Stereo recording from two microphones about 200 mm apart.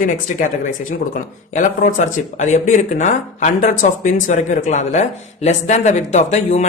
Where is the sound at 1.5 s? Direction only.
40° left (ahead or behind).